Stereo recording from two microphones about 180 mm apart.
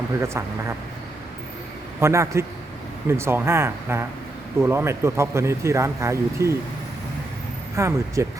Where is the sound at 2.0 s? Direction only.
15° right (ahead or behind).